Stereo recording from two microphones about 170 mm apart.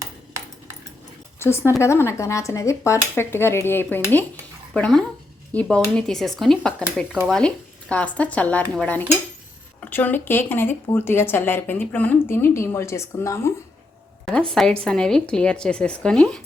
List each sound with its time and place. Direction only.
0.0 s ping: 15° right (ahead or behind)
1.4 s a woman's voice: 15° left (ahead or behind)
14.3 s a woman's voice: 5° left (ahead or behind)